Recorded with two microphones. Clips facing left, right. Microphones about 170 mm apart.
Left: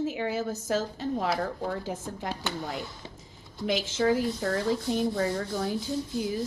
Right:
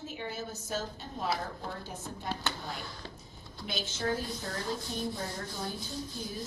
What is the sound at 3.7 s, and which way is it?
Speech, 90° left.